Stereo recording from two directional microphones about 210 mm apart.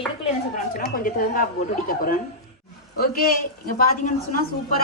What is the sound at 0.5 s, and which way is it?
Speech, 45° left (ahead or behind).